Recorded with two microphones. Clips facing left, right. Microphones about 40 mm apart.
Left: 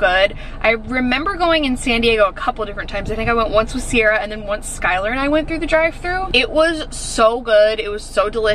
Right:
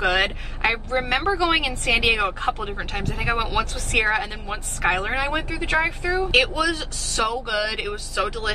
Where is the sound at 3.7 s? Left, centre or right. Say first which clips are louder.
Left 6 dB; left.